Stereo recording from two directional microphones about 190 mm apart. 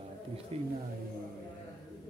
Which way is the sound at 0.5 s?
30° right (ahead or behind).